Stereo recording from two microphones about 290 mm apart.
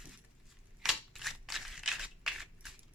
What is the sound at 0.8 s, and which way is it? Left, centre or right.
Crushing, centre.